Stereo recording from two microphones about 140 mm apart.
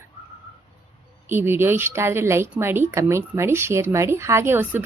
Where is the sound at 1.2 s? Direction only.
15° right (ahead or behind).